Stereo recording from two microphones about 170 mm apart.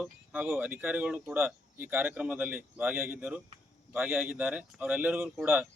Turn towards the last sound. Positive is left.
turn(degrees=-5)  # may be behind; listen again after turning